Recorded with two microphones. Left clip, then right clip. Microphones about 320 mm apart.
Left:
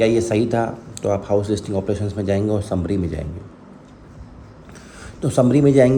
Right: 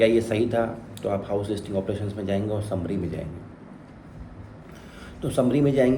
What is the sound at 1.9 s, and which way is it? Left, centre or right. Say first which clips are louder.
Speech: left 6 dB; centre.